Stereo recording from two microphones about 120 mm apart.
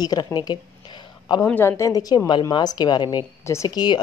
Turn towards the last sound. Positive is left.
turn(degrees=35)  # may be behind; listen again after turning